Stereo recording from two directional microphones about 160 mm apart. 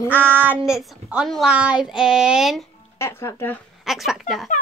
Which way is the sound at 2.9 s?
15° left (ahead or behind).